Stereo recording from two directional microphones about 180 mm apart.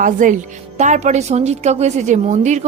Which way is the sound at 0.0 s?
45° right (ahead or behind).